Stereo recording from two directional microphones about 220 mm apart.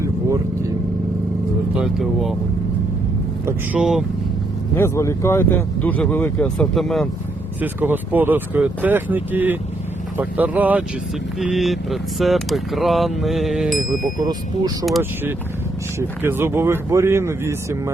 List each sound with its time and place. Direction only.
0.0 s vehicle: 15° right (ahead or behind)
1.7 s speech: centre (ahead or behind)
3.4 s speech: 5° right (ahead or behind)
4.7 s speech: 10° left (ahead or behind)
14.2 s speech: 15° right (ahead or behind)
14.8 s speech: 5° right (ahead or behind)